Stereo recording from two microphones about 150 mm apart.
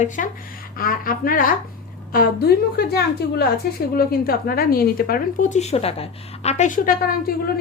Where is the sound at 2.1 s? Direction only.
85° left; by 6.7 s 45° left (ahead or behind).